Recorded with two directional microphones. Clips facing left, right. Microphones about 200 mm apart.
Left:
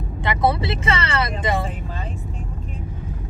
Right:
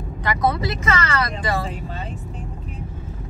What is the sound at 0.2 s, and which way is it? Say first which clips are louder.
Speech: left 1 dB; 25° left (ahead or behind).